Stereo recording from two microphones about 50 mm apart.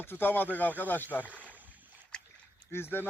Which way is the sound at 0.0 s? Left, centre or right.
Left.